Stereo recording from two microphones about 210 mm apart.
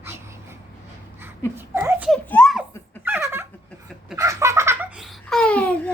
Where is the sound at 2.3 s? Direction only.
Centre (ahead or behind).